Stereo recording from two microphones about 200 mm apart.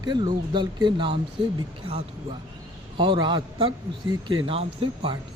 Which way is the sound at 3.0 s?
25° right (ahead or behind).